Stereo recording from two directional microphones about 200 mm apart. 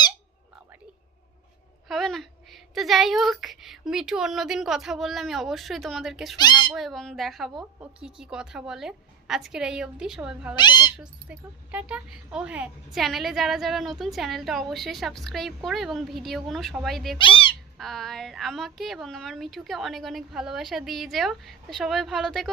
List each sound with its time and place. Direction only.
1.9 s speech: centre (ahead or behind)
10.5 s speech: 20° left (ahead or behind)
10.9 s speech: 5° right (ahead or behind)
17.2 s speech: 25° left (ahead or behind)
17.7 s speech: centre (ahead or behind)